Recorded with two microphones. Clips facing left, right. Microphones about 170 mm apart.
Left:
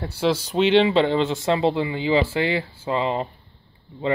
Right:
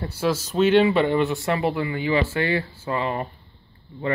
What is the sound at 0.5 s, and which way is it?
Speech, 15° left (ahead or behind).